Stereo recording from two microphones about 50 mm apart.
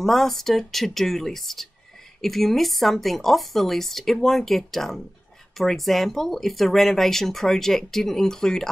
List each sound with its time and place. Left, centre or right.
0.0 s speech: centre